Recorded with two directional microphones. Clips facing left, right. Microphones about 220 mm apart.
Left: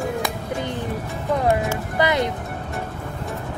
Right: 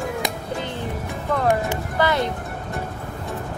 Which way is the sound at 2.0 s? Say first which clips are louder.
Left 1 dB; 20° left (ahead or behind).